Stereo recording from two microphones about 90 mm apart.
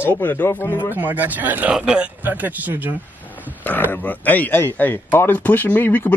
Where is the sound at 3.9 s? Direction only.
20° left (ahead or behind).